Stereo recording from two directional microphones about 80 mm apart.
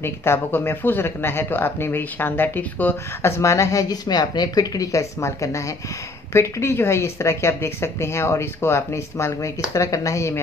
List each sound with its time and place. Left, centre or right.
0.0 s speech: left
3.9 s speech: left